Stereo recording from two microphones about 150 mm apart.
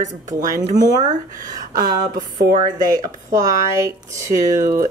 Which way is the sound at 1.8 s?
70° right (ahead or behind).